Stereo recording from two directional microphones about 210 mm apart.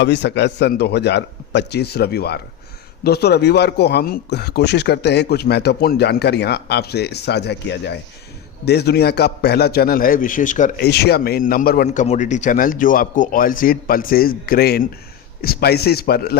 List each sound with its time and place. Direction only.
0.0 s a man's voice: 55° left (ahead or behind)